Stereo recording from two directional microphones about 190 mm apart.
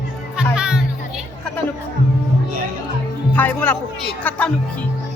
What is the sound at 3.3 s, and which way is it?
Speech, 10° left (ahead or behind).